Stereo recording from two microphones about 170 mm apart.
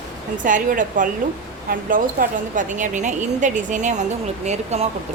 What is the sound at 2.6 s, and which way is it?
A woman's voice, 45° right (ahead or behind).